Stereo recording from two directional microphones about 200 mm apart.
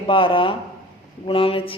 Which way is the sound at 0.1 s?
25° left (ahead or behind).